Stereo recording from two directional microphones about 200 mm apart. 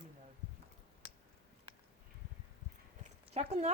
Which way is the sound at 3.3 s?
35° right (ahead or behind).